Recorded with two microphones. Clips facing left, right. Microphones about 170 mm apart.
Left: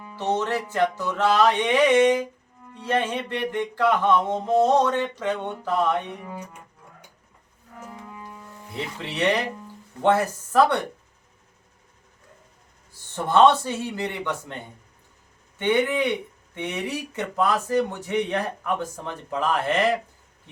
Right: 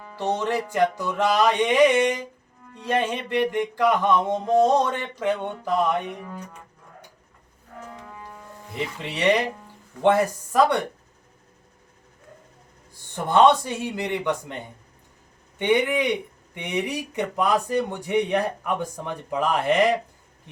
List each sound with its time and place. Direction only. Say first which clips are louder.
0.2 s speech: even; 15° right (ahead or behind)
9.0 s speech: right 2 dB; 15° right (ahead or behind)
12.9 s speech: even; 15° right (ahead or behind)
15.5 s speech: right 1 dB; 15° right (ahead or behind)